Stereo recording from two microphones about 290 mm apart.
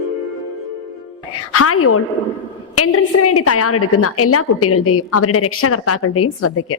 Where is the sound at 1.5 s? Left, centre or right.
Left.